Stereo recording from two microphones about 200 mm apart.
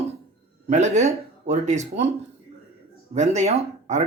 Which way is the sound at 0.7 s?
35° right (ahead or behind).